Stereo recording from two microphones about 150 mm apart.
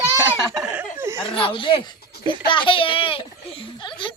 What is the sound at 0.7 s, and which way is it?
Chuckle, 15° right (ahead or behind).